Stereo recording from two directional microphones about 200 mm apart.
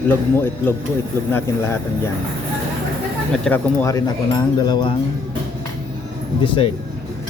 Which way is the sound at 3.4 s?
10° left (ahead or behind).